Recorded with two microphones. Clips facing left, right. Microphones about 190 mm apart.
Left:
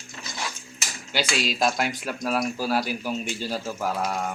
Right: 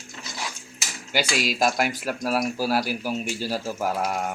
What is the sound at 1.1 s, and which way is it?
Speech, 10° right (ahead or behind).